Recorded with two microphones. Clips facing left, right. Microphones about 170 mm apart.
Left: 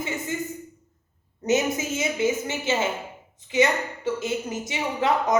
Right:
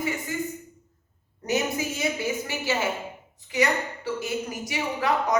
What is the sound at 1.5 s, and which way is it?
A woman's voice, 20° left (ahead or behind).